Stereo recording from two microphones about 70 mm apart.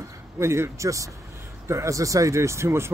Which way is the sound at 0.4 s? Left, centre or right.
Right.